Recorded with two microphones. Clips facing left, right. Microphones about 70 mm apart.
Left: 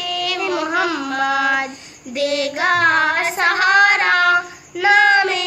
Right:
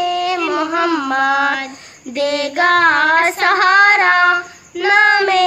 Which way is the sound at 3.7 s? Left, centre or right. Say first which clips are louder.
Right 2 dB; right.